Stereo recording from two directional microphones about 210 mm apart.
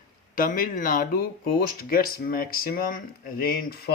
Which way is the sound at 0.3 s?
40° left (ahead or behind).